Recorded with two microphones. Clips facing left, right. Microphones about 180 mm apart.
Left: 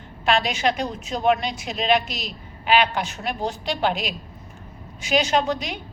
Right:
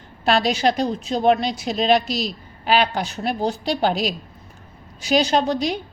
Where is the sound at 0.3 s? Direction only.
35° right (ahead or behind).